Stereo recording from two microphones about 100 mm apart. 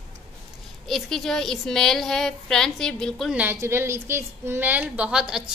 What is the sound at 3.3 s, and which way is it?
A woman's voice, 20° right (ahead or behind).